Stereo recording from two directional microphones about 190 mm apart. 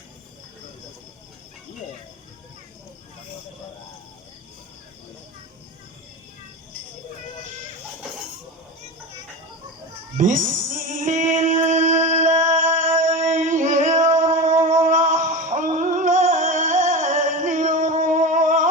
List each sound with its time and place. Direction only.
10.2 s music: 40° right (ahead or behind)